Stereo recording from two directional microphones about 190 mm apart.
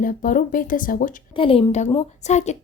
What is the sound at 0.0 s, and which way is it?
Speech, 45° left (ahead or behind).